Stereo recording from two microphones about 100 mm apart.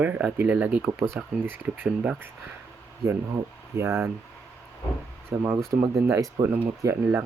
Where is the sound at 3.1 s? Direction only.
30° right (ahead or behind).